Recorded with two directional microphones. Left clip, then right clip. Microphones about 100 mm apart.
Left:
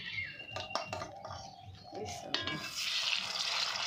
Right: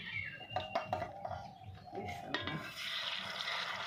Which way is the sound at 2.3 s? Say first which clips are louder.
Left 5 dB; 30° right (ahead or behind).